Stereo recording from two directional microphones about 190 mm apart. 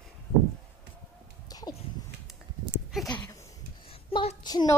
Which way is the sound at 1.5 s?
20° left (ahead or behind).